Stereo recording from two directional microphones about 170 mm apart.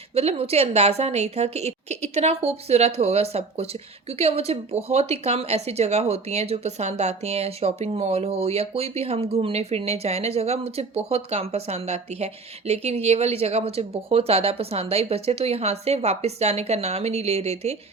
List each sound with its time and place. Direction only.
0.1 s a woman's voice: 35° right (ahead or behind)